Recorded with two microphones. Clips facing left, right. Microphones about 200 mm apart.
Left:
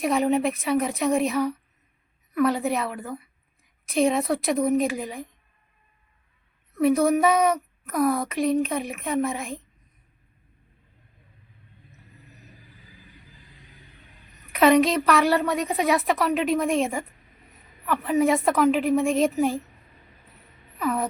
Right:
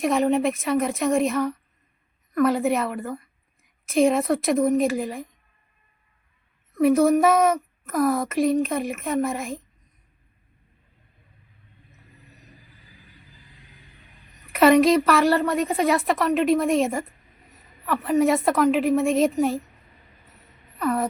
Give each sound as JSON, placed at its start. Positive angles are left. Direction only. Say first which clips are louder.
{"t": 0.0, "sound": "a woman's voice", "louder": "right 1 dB", "side_deg": 0}
{"t": 6.7, "sound": "speech", "louder": "right 2 dB", "side_deg": 0}
{"t": 14.5, "sound": "speech", "louder": "right 3 dB", "side_deg": 0}
{"t": 20.7, "sound": "a sound", "louder": "right 2 dB", "side_deg": 0}